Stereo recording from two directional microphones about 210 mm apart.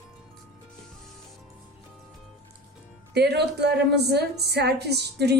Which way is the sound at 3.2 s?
50° right (ahead or behind).